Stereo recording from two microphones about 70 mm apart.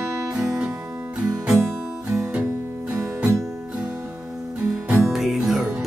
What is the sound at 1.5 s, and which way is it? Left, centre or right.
Music, centre.